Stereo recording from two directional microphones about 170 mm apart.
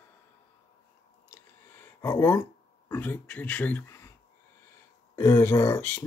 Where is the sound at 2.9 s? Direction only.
10° left (ahead or behind).